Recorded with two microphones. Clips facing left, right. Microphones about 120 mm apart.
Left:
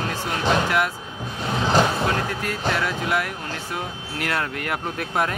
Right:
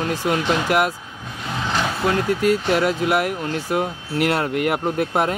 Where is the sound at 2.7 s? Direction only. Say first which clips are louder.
Right 6 dB; 50° right (ahead or behind).